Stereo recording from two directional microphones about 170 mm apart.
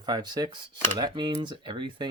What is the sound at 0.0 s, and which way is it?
Speech, 25° right (ahead or behind).